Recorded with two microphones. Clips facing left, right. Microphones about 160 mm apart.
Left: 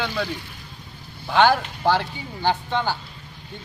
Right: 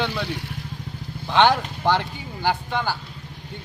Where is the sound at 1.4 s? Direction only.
20° right (ahead or behind).